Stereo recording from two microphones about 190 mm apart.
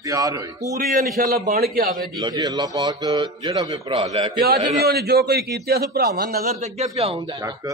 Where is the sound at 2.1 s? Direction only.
20° right (ahead or behind).